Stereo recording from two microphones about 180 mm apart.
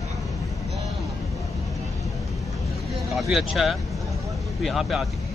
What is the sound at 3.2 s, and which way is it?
Speech, centre (ahead or behind).